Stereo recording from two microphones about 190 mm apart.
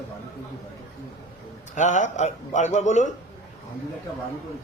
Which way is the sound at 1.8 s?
40° left (ahead or behind).